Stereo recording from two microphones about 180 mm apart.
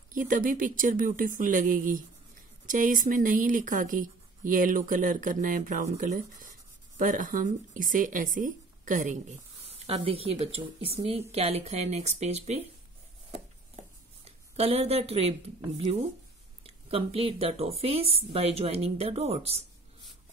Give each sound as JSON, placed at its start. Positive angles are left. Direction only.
{"t": 0.1, "sound": "a woman's voice", "side_deg": -50}
{"t": 13.3, "sound": "a sound", "side_deg": -35}
{"t": 16.6, "sound": "speech", "side_deg": -35}